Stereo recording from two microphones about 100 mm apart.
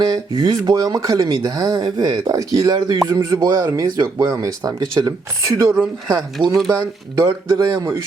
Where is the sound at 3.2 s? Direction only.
30° right (ahead or behind).